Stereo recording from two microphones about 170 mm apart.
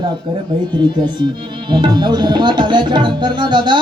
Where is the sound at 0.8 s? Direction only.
25° right (ahead or behind).